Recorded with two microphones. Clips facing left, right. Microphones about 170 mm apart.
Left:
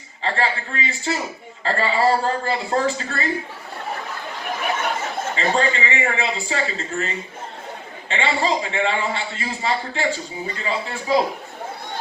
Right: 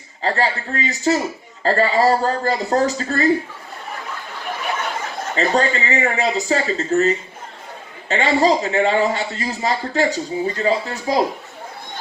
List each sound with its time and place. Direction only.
0.2 s a man's voice: 40° right (ahead or behind)
5.4 s a man's voice: 40° right (ahead or behind)
8.1 s a man's voice: 40° right (ahead or behind)